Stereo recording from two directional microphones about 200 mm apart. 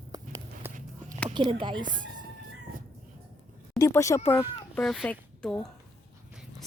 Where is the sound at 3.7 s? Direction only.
15° left (ahead or behind).